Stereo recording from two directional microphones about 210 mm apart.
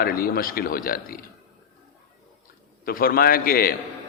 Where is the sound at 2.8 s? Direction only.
45° left (ahead or behind).